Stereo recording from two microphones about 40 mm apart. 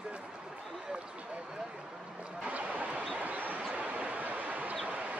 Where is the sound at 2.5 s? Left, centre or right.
Right.